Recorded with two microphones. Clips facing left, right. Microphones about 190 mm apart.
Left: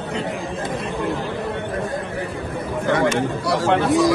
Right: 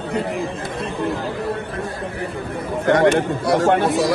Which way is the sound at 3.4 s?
55° right (ahead or behind).